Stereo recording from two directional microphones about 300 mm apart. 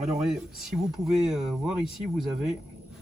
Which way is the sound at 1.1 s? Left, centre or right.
Centre.